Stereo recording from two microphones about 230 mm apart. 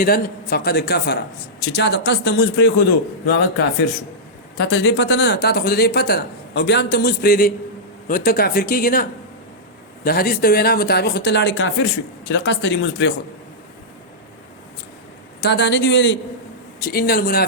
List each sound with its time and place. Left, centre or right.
0.0 s speech: left
4.5 s speech: left
15.4 s speech: left
16.8 s speech: left